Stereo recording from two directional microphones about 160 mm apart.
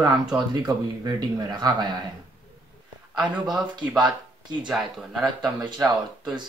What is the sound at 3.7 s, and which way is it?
Speech, 25° right (ahead or behind).